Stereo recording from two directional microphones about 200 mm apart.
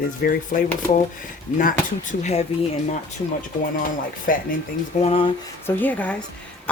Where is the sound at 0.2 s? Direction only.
50° left (ahead or behind).